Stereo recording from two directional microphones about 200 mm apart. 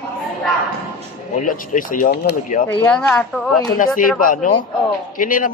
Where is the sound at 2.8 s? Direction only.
5° left (ahead or behind).